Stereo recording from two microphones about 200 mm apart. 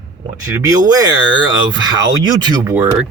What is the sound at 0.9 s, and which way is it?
A man's voice, 20° right (ahead or behind).